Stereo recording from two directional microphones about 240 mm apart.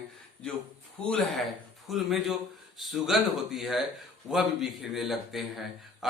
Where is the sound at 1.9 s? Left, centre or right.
Centre.